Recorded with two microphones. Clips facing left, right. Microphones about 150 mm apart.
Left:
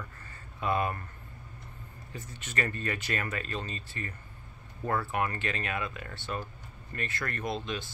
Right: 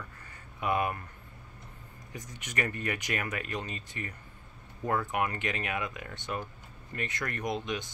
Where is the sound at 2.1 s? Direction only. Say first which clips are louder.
Even; 15° right (ahead or behind).